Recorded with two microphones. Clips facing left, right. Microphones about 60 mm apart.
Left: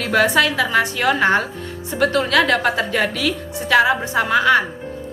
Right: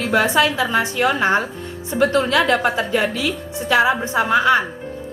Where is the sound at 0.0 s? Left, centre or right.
Right.